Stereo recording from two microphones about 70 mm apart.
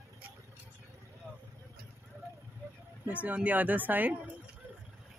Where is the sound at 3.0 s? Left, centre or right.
Right.